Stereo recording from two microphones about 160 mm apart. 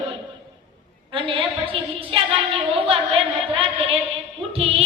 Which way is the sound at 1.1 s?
35° right (ahead or behind).